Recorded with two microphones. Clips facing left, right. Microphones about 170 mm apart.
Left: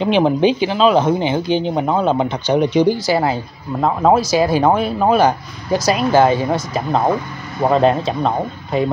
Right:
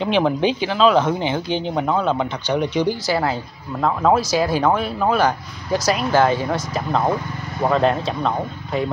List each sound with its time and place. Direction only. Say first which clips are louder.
0.1 s speech: left 4 dB; 25° left (ahead or behind); by 1.9 s 5° left (ahead or behind)
1.9 s speech: left 3 dB; 20° left (ahead or behind)